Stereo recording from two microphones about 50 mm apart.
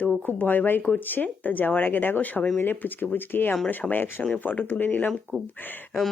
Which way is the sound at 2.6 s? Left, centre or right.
Left.